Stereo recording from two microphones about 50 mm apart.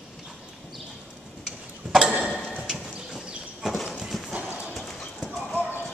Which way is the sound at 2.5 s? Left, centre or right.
Centre.